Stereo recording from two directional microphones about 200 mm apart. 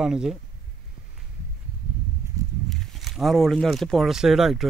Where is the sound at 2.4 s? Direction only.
15° right (ahead or behind).